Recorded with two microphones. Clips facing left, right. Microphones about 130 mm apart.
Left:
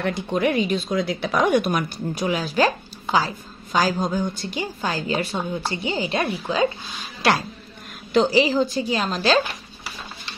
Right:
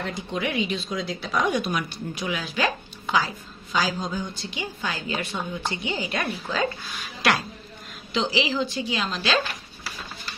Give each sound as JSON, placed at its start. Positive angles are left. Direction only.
{"t": 0.0, "sound": "speech", "side_deg": 55}
{"t": 3.7, "sound": "a woman's voice", "side_deg": 50}
{"t": 8.1, "sound": "speech", "side_deg": 45}